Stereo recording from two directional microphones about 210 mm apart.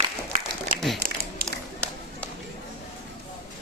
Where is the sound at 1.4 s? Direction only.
45° right (ahead or behind).